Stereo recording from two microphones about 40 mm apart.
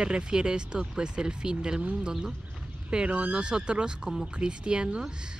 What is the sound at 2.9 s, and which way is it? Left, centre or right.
Speech, right.